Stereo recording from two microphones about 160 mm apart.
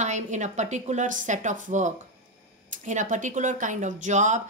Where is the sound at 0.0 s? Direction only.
50° right (ahead or behind).